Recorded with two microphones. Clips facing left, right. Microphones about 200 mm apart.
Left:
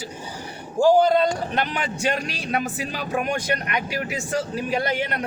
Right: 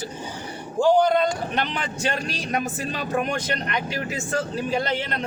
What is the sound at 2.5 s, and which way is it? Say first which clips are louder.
Speech: left 1 dB; 10° left (ahead or behind).